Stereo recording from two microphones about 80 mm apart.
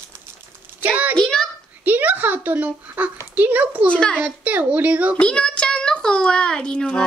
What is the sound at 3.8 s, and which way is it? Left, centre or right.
Speech, centre.